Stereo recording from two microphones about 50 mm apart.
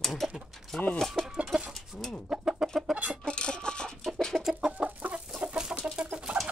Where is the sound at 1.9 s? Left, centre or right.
Right.